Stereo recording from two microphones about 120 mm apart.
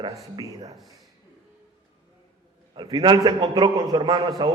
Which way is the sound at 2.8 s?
40° right (ahead or behind).